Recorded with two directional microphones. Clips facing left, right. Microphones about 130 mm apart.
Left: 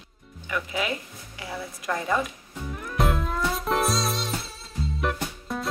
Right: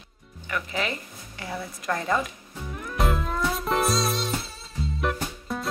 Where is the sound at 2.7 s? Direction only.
Centre (ahead or behind).